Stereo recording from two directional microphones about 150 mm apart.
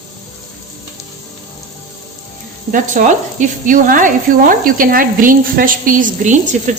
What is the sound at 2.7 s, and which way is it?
Speech, 60° right (ahead or behind).